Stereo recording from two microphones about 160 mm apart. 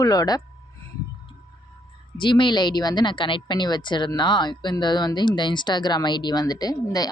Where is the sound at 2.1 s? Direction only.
30° left (ahead or behind).